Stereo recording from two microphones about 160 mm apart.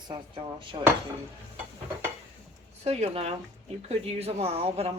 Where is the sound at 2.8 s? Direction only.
40° right (ahead or behind).